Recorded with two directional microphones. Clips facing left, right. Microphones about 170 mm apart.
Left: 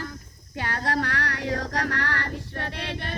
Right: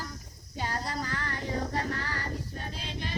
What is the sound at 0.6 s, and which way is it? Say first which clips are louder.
Female singing: left 6 dB; 75° left (ahead or behind).